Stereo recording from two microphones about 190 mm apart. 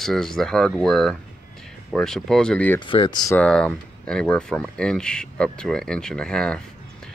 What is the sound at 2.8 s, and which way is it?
Speech, 25° left (ahead or behind).